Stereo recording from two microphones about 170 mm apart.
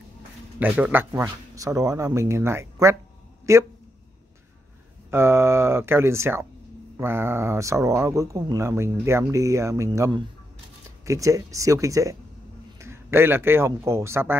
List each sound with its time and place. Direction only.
0.6 s speech: 10° right (ahead or behind)
5.1 s speech: 15° right (ahead or behind)